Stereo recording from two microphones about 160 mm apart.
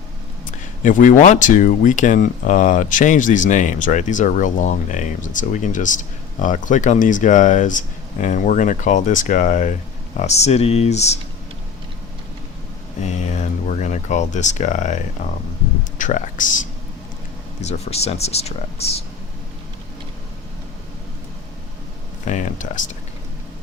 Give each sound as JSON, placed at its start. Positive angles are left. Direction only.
{"t": 0.8, "sound": "speech", "side_deg": 55}
{"t": 13.0, "sound": "speech", "side_deg": 45}
{"t": 22.3, "sound": "speech", "side_deg": 50}